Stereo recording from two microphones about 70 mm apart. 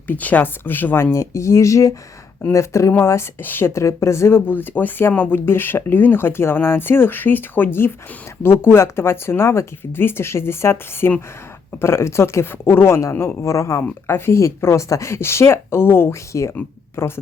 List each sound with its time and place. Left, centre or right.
0.1 s speech: left
1.1 s a man's voice: left
3.7 s a man's voice: left
16.3 s a man's voice: left
16.9 s speech: left